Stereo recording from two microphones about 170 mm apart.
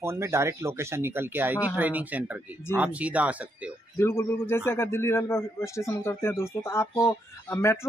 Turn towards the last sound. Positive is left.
turn(degrees=15)  # may be behind; listen again after turning